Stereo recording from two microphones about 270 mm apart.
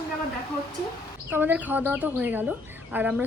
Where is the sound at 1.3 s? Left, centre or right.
Centre.